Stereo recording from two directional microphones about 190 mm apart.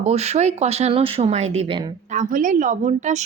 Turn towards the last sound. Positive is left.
turn(degrees=-40)  # may be behind; listen again after turning